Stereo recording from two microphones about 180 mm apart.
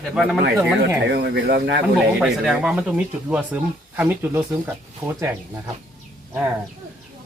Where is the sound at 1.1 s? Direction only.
60° right (ahead or behind).